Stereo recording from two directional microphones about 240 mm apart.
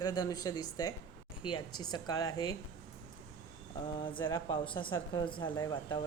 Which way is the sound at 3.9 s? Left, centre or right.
Centre.